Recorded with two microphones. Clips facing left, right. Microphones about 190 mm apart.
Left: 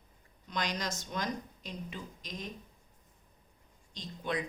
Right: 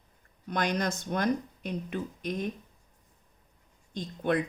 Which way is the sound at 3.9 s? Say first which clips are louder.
Right 8 dB; 55° right (ahead or behind).